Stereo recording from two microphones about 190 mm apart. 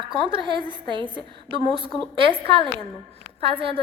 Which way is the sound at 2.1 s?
25° right (ahead or behind).